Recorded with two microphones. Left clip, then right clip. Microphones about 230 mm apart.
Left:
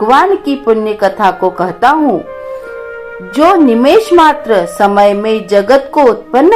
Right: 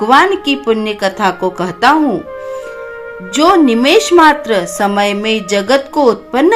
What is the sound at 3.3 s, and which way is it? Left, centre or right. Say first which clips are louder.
Speech: left 2 dB; right.